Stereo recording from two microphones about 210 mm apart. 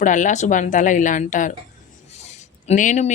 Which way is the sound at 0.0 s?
35° left (ahead or behind).